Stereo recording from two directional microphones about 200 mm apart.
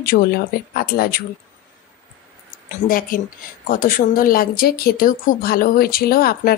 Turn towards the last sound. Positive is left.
turn(degrees=50)  # may be behind; listen again after turning